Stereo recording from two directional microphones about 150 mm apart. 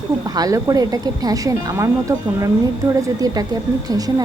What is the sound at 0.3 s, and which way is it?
A woman's voice, 25° right (ahead or behind).